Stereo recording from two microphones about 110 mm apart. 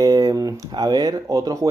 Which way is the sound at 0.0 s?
35° right (ahead or behind).